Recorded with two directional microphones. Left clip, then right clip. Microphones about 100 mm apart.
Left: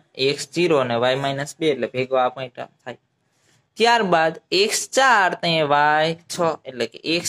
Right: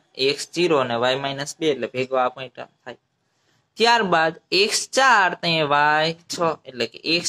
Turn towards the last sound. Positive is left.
turn(degrees=35)  # may be behind; listen again after turning